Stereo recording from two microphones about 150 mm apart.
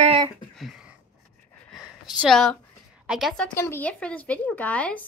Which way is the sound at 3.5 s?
15° left (ahead or behind).